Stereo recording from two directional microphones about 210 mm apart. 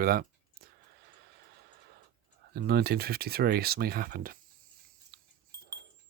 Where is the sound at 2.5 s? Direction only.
50° right (ahead or behind).